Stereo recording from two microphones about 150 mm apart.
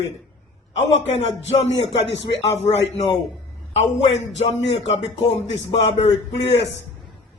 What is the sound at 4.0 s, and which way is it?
A man's voice, 45° left (ahead or behind).